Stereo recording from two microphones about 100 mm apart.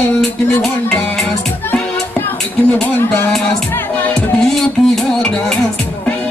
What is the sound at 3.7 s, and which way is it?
Music, 20° left (ahead or behind).